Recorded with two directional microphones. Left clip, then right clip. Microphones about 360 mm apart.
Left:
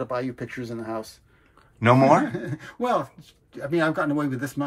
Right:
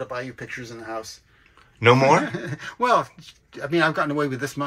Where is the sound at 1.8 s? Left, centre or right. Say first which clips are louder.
Right 1 dB; centre.